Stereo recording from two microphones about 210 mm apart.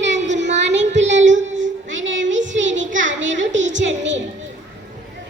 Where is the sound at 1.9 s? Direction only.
65° right (ahead or behind).